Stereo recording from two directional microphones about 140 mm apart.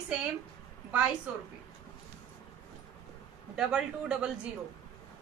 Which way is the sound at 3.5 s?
5° right (ahead or behind).